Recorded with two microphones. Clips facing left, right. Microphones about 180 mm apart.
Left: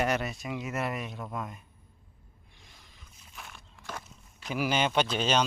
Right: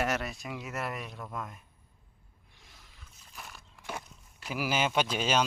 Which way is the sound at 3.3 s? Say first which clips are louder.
Even; centre (ahead or behind).